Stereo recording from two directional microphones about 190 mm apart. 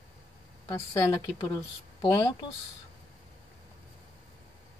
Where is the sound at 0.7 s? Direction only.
20° left (ahead or behind).